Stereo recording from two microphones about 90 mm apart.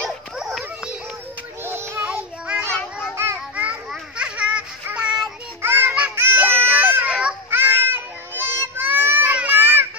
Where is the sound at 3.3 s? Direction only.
15° right (ahead or behind).